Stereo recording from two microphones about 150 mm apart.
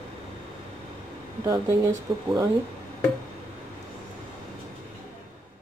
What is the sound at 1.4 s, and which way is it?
Speech, 20° right (ahead or behind).